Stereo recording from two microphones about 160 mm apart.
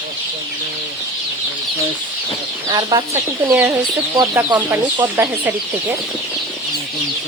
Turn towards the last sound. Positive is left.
turn(degrees=-15)  # may be behind; listen again after turning